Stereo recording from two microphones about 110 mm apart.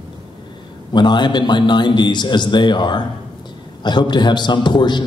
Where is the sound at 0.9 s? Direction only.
45° left (ahead or behind).